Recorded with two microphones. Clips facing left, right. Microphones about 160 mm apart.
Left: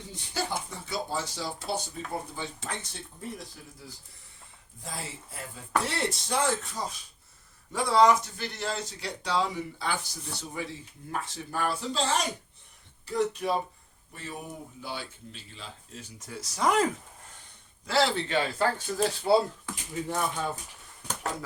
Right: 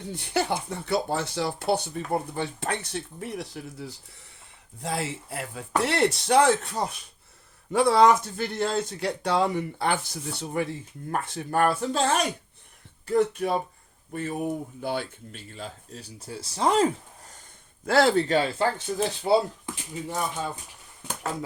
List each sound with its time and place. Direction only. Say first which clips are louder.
0.1 s speech: right 6 dB; 65° right (ahead or behind); by 16.9 s 30° right (ahead or behind)
17.8 s speech: right 6 dB; 50° right (ahead or behind)
18.9 s speech: even; 20° right (ahead or behind)